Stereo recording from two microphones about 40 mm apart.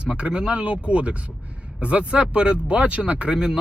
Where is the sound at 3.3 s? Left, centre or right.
Centre.